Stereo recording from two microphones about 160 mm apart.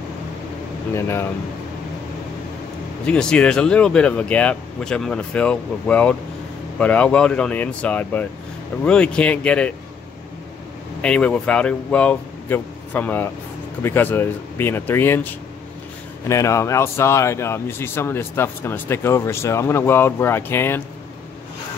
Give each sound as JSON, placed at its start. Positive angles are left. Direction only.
{"t": 0.9, "sound": "speech", "side_deg": 15}
{"t": 3.1, "sound": "speech", "side_deg": 5}
{"t": 11.0, "sound": "speech", "side_deg": 5}
{"t": 16.3, "sound": "speech", "side_deg": 20}